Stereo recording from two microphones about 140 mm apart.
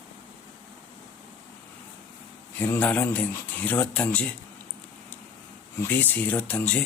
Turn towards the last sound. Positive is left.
turn(degrees=10)  # may be behind; listen again after turning